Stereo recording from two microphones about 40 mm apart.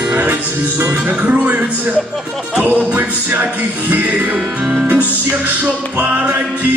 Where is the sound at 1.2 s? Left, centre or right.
Right.